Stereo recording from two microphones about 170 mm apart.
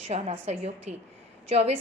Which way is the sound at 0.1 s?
40° right (ahead or behind).